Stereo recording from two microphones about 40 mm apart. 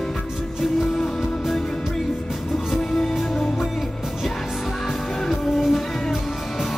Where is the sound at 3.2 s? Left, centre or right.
Centre.